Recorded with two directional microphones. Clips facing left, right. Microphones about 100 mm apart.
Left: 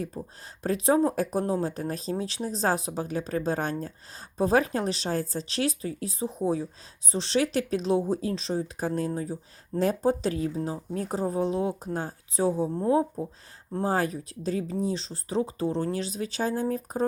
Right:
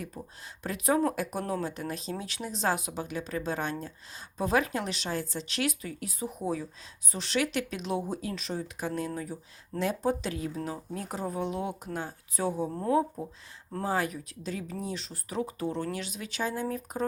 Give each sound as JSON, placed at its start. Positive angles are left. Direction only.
{"t": 0.1, "sound": "speech", "side_deg": 35}
{"t": 13.8, "sound": "speech", "side_deg": 35}